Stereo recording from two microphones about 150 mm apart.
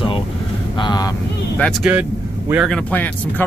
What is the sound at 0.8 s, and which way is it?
Speech, 30° left (ahead or behind).